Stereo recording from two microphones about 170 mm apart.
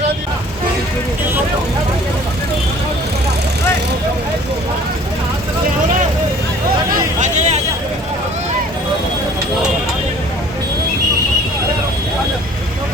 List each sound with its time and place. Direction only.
6.9 s vehicle: 45° right (ahead or behind)